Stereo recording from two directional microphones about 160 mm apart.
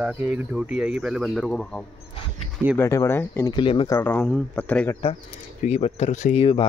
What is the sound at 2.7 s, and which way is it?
Speech, 15° left (ahead or behind).